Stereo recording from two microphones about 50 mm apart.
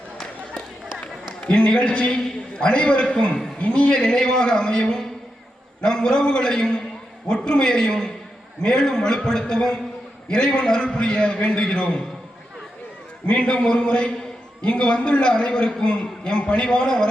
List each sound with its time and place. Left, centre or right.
1.0 s a man's voice: left
13.2 s a man's voice: left